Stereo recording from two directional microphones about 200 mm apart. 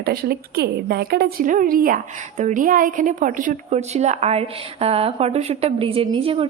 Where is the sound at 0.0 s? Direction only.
50° right (ahead or behind).